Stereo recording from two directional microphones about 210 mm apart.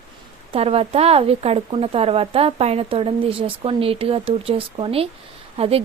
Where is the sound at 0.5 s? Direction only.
30° right (ahead or behind).